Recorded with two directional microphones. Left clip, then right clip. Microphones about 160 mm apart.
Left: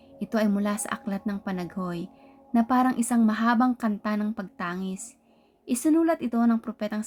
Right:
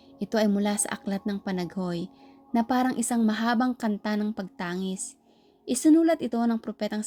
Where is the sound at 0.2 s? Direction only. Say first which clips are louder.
Right 1 dB; 20° right (ahead or behind).